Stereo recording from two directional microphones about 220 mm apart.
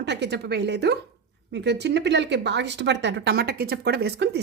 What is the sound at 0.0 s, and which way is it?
A woman's voice, 50° right (ahead or behind).